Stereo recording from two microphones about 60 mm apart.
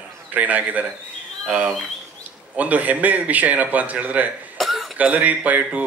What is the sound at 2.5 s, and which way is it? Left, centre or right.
Speech, right.